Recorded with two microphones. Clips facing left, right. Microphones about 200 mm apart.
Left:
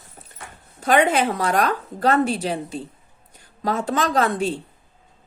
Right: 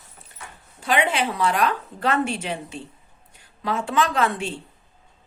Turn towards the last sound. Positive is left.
turn(degrees=40)  # may be behind; listen again after turning